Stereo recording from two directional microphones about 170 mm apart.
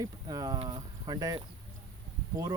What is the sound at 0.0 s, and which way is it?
Speech, 20° right (ahead or behind).